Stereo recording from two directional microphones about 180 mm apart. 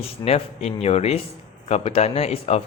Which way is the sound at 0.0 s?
35° left (ahead or behind).